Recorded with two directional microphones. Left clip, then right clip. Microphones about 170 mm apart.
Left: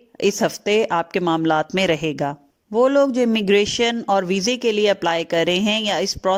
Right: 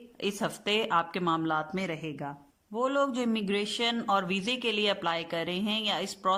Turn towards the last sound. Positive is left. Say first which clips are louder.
# left 9 dB
turn(degrees=40)  # may be behind; listen again after turning